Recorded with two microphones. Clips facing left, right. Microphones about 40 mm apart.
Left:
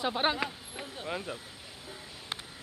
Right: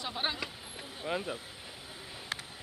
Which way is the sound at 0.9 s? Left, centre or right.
Centre.